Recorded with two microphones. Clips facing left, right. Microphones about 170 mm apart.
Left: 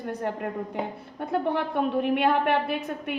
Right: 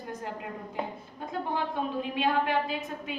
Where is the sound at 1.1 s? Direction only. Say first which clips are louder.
Left 6 dB; 65° left (ahead or behind).